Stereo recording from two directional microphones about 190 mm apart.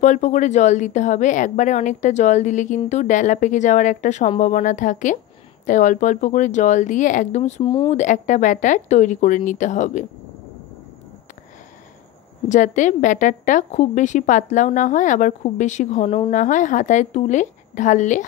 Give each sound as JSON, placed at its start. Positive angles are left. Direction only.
{"t": 0.0, "sound": "a woman's voice", "side_deg": 40}
{"t": 7.6, "sound": "speech", "side_deg": 25}
{"t": 7.9, "sound": "a woman's voice", "side_deg": 40}
{"t": 12.4, "sound": "a woman's voice", "side_deg": 40}